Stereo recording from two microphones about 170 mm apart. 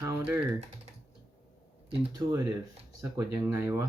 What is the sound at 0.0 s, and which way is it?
Speech, 15° right (ahead or behind).